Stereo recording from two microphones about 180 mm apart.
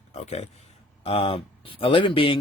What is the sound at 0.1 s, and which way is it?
Speech, 40° left (ahead or behind).